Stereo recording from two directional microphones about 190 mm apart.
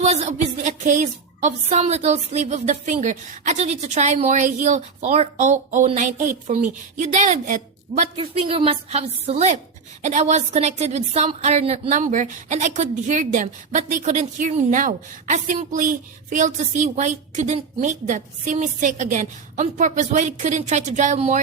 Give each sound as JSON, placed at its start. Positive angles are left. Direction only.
{"t": 0.0, "sound": "a woman's voice", "side_deg": -35}
{"t": 8.1, "sound": "a woman's voice", "side_deg": -30}